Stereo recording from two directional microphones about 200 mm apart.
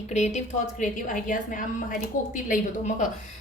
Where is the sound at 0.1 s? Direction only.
35° left (ahead or behind).